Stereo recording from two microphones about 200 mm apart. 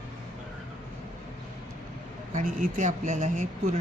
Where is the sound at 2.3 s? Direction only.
40° right (ahead or behind).